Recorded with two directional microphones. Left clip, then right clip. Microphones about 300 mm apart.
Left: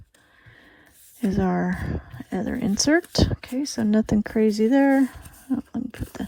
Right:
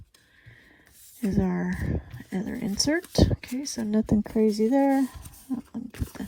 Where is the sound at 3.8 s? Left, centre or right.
Right.